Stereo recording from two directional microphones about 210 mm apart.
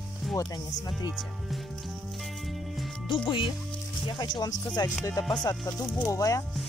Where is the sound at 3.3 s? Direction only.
25° left (ahead or behind).